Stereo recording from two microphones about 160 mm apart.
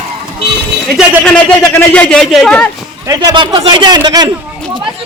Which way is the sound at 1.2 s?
10° left (ahead or behind).